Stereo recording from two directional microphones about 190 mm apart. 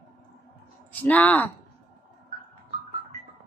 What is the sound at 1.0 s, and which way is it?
Speech, 10° left (ahead or behind).